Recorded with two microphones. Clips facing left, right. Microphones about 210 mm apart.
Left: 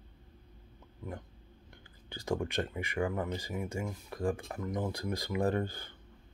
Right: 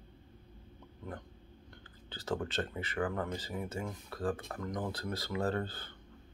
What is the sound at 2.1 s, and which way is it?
Speech, 10° left (ahead or behind).